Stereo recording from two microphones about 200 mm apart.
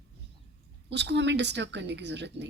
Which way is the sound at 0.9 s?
60° right (ahead or behind).